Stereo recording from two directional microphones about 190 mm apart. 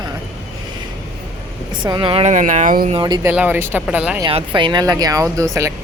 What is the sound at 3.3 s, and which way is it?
Speech, 10° right (ahead or behind).